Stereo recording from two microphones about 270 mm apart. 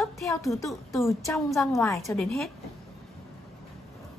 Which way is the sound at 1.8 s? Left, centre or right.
Centre.